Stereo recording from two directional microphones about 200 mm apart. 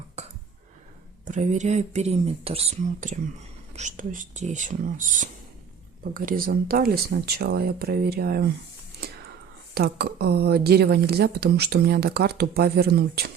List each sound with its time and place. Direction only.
1.2 s speech: 35° right (ahead or behind)
9.7 s speech: 55° right (ahead or behind)